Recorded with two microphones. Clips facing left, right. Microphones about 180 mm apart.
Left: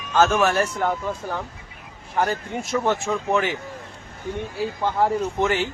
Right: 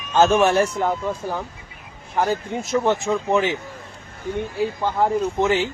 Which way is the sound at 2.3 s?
20° right (ahead or behind).